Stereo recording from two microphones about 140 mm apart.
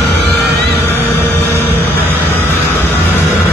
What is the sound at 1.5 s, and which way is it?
Vehicle, 15° left (ahead or behind).